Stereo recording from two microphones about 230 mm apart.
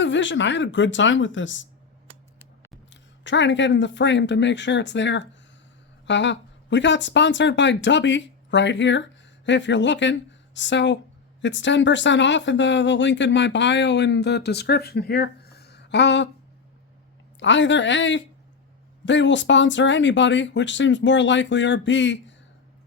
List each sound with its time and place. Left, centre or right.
0.0 s speech: left
2.9 s speech: left
17.4 s speech: left